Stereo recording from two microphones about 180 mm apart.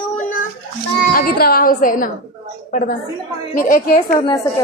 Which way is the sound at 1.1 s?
55° left (ahead or behind).